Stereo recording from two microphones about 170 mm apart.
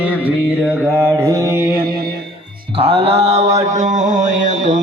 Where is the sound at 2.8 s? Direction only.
35° right (ahead or behind).